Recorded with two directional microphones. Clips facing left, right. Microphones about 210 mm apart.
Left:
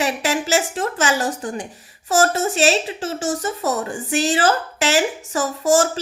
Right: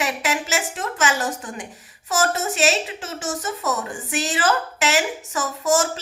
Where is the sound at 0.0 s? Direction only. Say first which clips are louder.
Left 4 dB; 30° left (ahead or behind).